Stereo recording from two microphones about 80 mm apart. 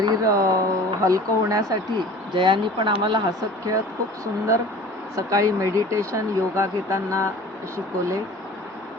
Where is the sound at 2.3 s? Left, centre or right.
Right.